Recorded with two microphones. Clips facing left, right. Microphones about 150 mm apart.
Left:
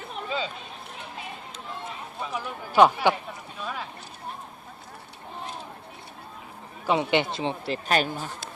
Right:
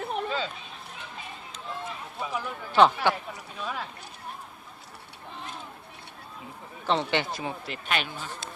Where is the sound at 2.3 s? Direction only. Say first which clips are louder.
Left 2 dB; 10° left (ahead or behind).